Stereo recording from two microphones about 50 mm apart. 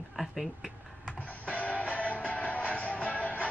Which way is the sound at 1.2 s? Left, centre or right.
Left.